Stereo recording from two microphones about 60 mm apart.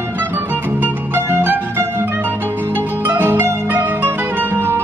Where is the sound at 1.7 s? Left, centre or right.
Right.